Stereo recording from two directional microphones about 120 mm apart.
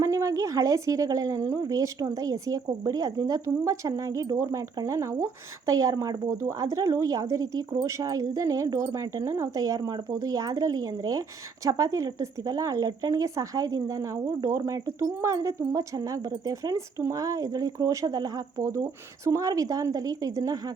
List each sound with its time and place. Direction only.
0.0 s speech: 25° right (ahead or behind)